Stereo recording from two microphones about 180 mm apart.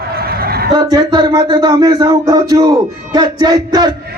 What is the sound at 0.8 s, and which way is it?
A man's voice, 20° right (ahead or behind).